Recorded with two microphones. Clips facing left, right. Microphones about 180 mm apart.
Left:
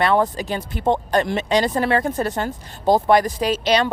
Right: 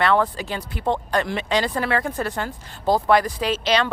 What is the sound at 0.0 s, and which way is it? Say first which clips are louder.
Speech: left 2 dB; 15° left (ahead or behind).